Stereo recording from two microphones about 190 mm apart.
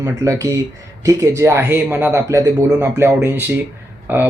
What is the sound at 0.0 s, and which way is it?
Speech, 15° right (ahead or behind).